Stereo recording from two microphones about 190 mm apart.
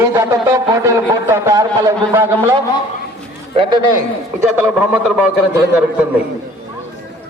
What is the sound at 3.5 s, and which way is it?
Speech, 25° right (ahead or behind).